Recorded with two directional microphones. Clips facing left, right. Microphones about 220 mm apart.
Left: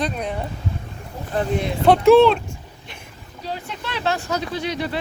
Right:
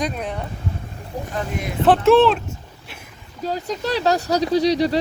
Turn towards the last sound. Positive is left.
turn(degrees=-35)  # may be behind; listen again after turning